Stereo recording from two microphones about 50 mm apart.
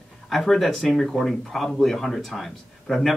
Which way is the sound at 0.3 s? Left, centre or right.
Centre.